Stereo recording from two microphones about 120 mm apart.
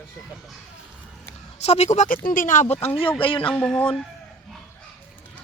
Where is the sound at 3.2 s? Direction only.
45° left (ahead or behind).